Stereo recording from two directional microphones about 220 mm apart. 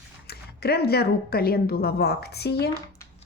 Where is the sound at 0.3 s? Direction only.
45° left (ahead or behind).